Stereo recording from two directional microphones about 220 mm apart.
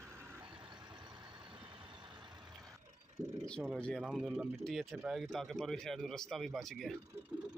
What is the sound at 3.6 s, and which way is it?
Speech, centre (ahead or behind).